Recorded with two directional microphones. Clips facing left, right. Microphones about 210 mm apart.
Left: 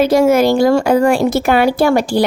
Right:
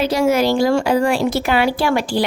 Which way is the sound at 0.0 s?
50° left (ahead or behind).